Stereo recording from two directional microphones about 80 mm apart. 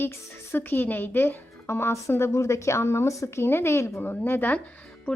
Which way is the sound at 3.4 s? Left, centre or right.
Left.